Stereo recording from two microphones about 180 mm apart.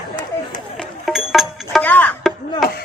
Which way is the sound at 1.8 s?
10° left (ahead or behind).